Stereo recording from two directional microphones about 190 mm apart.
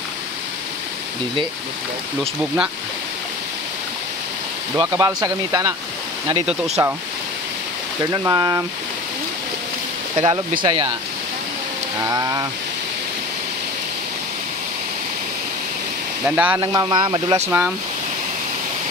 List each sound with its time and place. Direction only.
4.7 s speech: 20° right (ahead or behind)
6.8 s speech: 20° right (ahead or behind)
8.1 s speech: 15° right (ahead or behind)
10.6 s speech: 25° right (ahead or behind)
12.0 s speech: 20° right (ahead or behind)
16.3 s speech: 5° right (ahead or behind)
16.6 s speech: 25° right (ahead or behind)
17.5 s speech: 10° right (ahead or behind)